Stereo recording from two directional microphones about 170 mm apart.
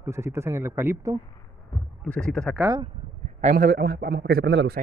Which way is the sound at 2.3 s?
5° left (ahead or behind).